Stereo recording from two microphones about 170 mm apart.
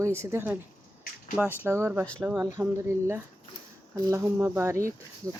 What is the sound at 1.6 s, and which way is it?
Speech, 15° right (ahead or behind).